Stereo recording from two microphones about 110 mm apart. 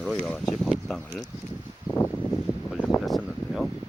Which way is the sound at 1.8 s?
15° left (ahead or behind).